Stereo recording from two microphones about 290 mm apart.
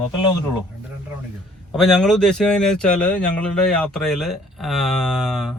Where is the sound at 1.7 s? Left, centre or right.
Centre.